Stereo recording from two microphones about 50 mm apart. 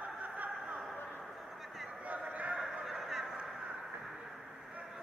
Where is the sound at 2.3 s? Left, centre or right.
Right.